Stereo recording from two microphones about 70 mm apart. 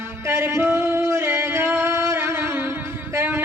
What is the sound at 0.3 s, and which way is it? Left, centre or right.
Music, right.